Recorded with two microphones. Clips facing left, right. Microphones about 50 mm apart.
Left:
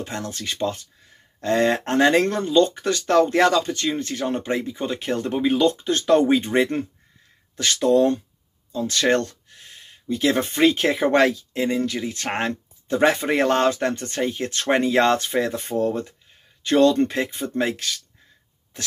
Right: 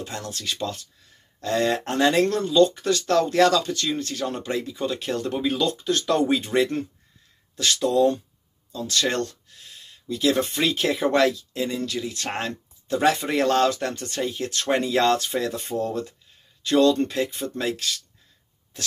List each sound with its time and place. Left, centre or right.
0.0 s speech: left